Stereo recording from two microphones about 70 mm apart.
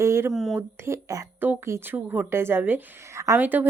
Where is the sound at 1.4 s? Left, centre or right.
Right.